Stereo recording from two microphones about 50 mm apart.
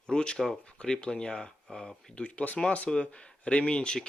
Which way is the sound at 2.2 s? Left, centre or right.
Left.